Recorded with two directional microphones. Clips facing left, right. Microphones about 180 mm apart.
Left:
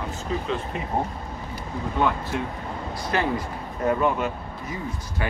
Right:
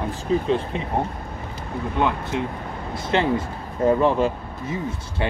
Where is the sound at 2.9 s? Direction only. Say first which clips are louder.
Right 4 dB; 25° right (ahead or behind).